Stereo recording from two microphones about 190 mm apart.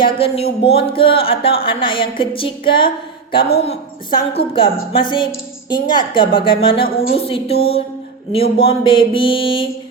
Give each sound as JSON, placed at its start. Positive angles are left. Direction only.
{"t": 0.0, "sound": "a woman's voice", "side_deg": 30}